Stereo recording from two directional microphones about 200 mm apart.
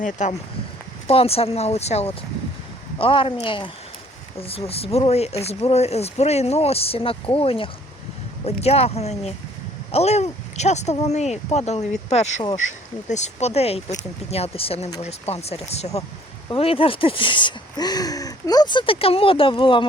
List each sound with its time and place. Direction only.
0.0 s speech: 35° left (ahead or behind)